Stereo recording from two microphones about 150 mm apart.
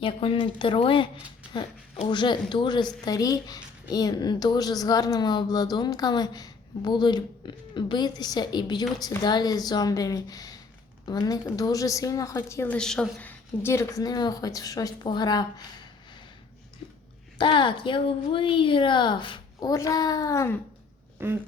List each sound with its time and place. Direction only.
0.0 s a woman's voice: 35° left (ahead or behind)
2.0 s a woman's voice: 30° left (ahead or behind)
12.7 s a woman's voice: 5° left (ahead or behind); by 15.6 s 25° left (ahead or behind)
17.3 s a woman's voice: 35° left (ahead or behind)
21.2 s a sound: 15° right (ahead or behind)